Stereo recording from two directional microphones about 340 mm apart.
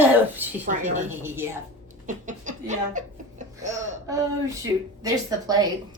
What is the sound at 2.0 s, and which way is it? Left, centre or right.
Speech, right.